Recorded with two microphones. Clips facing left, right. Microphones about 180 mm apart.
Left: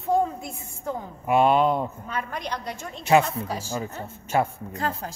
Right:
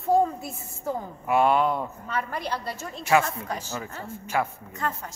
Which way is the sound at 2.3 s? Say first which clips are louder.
Right 1 dB; 5° right (ahead or behind).